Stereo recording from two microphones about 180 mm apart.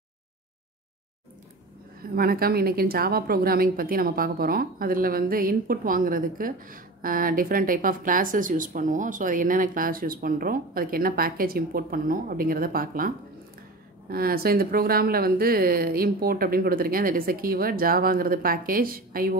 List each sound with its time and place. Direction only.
2.1 s a woman's voice: 55° right (ahead or behind)